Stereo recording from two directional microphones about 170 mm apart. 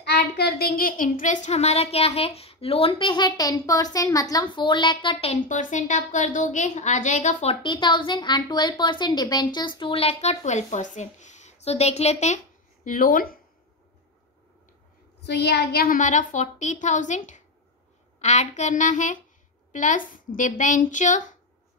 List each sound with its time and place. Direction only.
0.0 s a woman's voice: 70° left (ahead or behind); by 7.5 s 45° left (ahead or behind)
7.6 s a woman's voice: 25° left (ahead or behind)
12.8 s speech: 55° left (ahead or behind)
15.2 s a woman's voice: 80° left; by 21.4 s 45° left (ahead or behind)